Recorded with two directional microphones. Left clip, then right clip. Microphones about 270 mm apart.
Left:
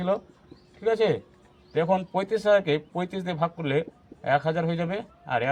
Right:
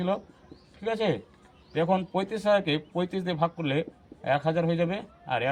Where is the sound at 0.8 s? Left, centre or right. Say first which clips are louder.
Left 5 dB; centre.